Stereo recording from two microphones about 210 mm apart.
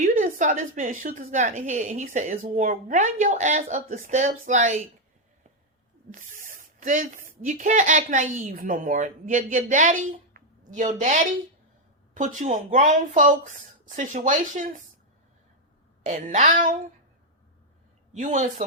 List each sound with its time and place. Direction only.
0.0 s a woman's voice: 40° right (ahead or behind)
6.1 s a woman's voice: 40° right (ahead or behind)
16.0 s a woman's voice: 35° right (ahead or behind)
18.1 s a woman's voice: 35° right (ahead or behind)